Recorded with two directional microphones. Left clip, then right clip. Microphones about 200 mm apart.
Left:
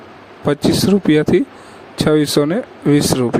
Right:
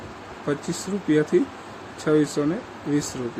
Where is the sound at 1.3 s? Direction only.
50° left (ahead or behind).